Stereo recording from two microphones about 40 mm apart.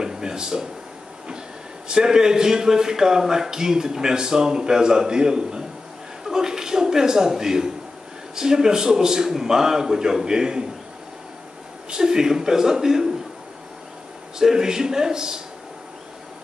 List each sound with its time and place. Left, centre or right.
0.0 s a sound: centre
1.9 s a man's voice: centre
6.2 s chuckle: centre
8.4 s a man's voice: centre
11.9 s a man's voice: centre
14.4 s a man's voice: centre